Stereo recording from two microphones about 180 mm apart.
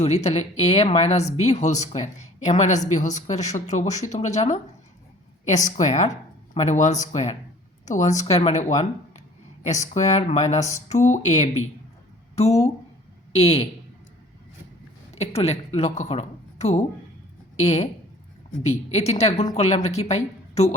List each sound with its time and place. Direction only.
0.0 s speech: 40° left (ahead or behind)
15.1 s speech: 35° left (ahead or behind)